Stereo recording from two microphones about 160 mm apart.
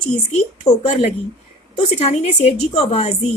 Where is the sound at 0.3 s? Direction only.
50° left (ahead or behind).